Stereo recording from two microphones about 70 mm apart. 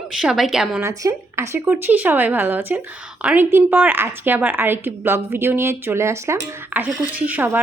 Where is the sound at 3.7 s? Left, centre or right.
Right.